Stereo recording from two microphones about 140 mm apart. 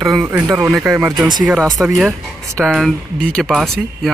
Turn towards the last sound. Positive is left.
turn(degrees=0)  # may be behind; listen again after turning